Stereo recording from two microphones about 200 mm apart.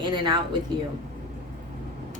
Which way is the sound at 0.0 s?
25° right (ahead or behind).